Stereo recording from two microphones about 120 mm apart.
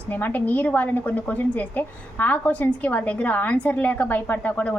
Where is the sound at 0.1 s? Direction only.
15° left (ahead or behind).